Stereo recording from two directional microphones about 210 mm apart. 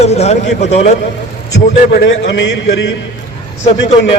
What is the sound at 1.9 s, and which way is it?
A man's voice, 50° left (ahead or behind).